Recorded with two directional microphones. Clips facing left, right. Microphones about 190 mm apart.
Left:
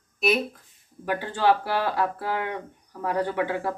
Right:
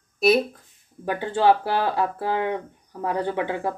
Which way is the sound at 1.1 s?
25° right (ahead or behind).